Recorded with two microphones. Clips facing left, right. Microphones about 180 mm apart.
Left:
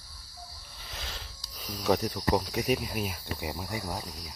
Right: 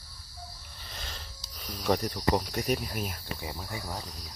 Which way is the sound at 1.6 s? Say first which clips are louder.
Left 1 dB; 5° left (ahead or behind).